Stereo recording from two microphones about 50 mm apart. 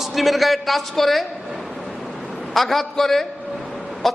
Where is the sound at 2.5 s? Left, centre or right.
Centre.